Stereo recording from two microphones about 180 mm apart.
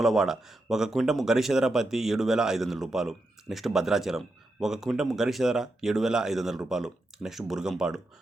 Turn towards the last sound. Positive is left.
turn(degrees=-5)  # may be behind; listen again after turning